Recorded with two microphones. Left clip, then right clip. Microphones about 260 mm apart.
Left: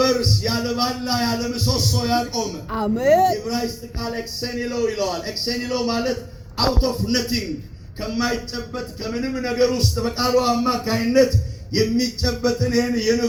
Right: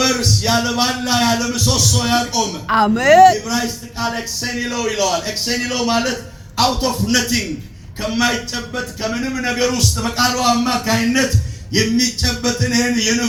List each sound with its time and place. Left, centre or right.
0.0 s a man's voice: right
8.7 s a man's voice: right